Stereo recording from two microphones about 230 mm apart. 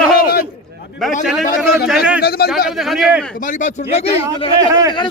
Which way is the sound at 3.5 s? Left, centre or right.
Left.